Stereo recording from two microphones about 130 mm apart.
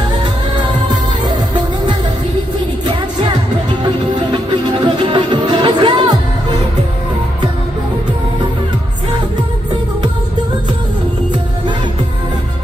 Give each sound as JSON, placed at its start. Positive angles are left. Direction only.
{"t": 4.8, "sound": "music", "side_deg": -40}